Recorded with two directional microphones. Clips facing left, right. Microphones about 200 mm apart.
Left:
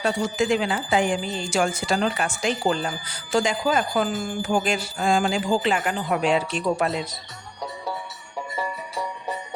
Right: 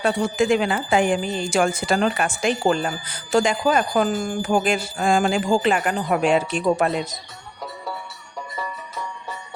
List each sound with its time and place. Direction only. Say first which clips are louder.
0.0 s speech: right 3 dB; 55° right (ahead or behind)
8.4 s music: left 2 dB; 10° left (ahead or behind)